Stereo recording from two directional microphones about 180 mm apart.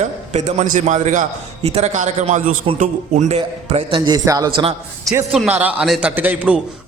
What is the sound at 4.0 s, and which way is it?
Speech, 20° right (ahead or behind).